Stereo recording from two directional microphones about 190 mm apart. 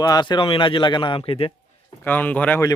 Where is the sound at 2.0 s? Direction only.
10° left (ahead or behind).